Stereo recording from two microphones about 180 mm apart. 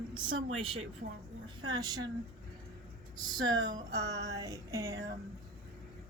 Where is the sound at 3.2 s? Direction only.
25° right (ahead or behind).